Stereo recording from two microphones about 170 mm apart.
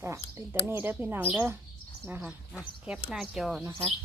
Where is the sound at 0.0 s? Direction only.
15° right (ahead or behind).